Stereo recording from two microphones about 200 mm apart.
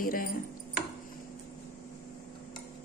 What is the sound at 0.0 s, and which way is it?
Chopping, 45° left (ahead or behind).